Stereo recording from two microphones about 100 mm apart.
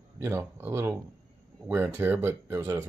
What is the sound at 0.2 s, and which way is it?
Speech, 25° right (ahead or behind).